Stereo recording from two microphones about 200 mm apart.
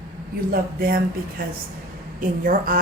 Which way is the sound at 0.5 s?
45° right (ahead or behind).